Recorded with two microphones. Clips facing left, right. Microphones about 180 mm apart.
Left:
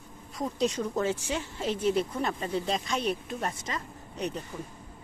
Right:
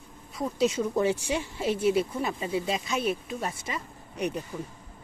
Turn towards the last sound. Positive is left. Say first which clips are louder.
# right 3 dB
turn(degrees=-10)  # may be behind; listen again after turning